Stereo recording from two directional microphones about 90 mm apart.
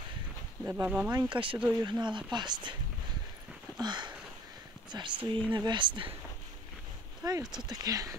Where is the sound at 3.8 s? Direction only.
55° right (ahead or behind).